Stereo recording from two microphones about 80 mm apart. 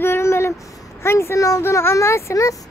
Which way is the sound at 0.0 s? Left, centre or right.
Left.